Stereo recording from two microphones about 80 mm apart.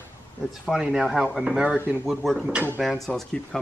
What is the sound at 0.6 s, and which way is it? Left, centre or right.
Speech, centre.